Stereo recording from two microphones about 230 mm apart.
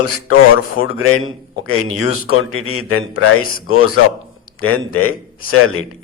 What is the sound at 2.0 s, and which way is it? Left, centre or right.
A man's voice, left.